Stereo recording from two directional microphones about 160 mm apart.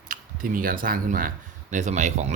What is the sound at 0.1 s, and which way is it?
Speech, 60° right (ahead or behind).